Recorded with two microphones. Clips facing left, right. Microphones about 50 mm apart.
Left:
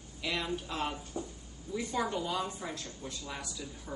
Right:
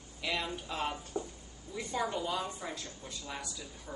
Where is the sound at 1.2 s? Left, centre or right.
Right.